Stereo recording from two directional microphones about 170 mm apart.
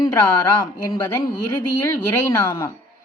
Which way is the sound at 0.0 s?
25° left (ahead or behind).